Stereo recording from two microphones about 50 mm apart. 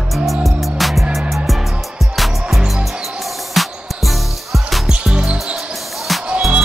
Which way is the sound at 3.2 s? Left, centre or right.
Centre.